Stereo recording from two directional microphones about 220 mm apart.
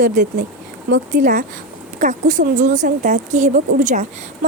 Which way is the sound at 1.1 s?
35° right (ahead or behind).